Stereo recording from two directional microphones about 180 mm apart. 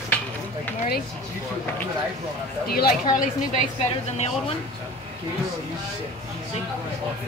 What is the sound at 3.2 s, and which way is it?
Speech, 45° left (ahead or behind).